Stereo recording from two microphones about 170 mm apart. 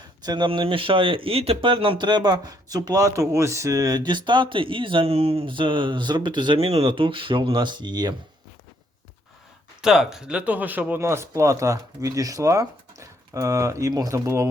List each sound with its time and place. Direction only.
0.2 s speech: 25° right (ahead or behind)
9.8 s speech: centre (ahead or behind)